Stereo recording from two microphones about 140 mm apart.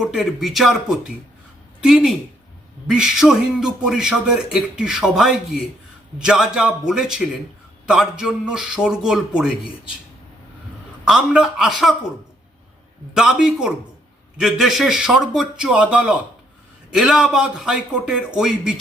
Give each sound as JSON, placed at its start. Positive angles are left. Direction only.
{"t": 0.0, "sound": "a man's voice", "side_deg": -5}
{"t": 11.0, "sound": "a man's voice", "side_deg": -5}
{"t": 13.1, "sound": "a man's voice", "side_deg": -5}